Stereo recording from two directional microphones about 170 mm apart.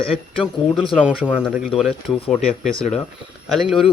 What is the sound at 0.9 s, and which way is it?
Speech, 5° right (ahead or behind).